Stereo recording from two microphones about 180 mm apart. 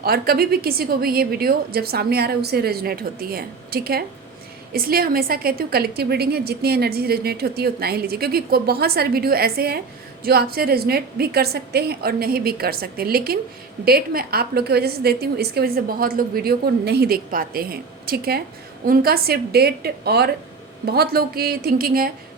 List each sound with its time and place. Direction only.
0.0 s a woman's voice: 55° right (ahead or behind)